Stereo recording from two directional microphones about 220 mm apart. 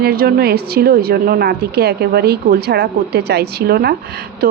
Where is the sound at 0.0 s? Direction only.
45° right (ahead or behind).